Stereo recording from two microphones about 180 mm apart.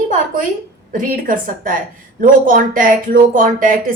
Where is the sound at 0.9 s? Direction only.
50° right (ahead or behind).